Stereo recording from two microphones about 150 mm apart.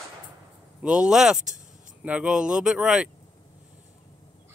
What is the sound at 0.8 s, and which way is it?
Speech, 5° right (ahead or behind).